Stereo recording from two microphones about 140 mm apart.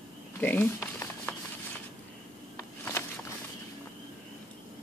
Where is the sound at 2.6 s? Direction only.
20° left (ahead or behind).